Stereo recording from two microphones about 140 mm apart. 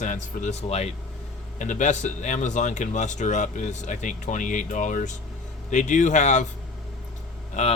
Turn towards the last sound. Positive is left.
turn(degrees=50)  # may be behind; listen again after turning